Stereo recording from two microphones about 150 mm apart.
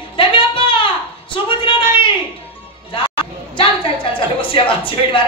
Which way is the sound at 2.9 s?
35° left (ahead or behind).